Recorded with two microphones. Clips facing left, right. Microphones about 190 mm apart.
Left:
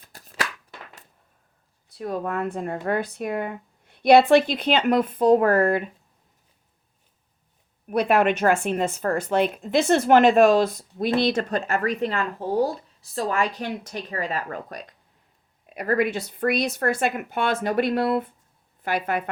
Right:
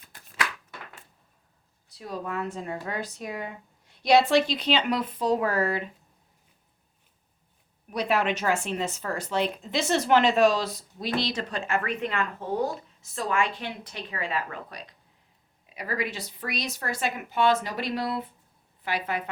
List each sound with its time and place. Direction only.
1.9 s speech: 55° left (ahead or behind)
7.9 s speech: 55° left (ahead or behind)